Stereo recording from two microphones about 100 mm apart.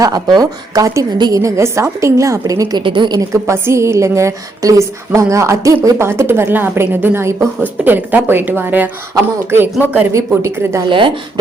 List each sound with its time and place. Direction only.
0.0 s a woman's voice: 40° right (ahead or behind)
2.8 s a woman's voice: 50° right (ahead or behind)
3.2 s a woman's voice: 30° right (ahead or behind)
10.8 s a woman's voice: 60° right (ahead or behind)